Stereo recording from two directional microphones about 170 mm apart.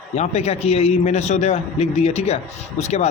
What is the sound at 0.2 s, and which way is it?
A man's voice, 40° left (ahead or behind).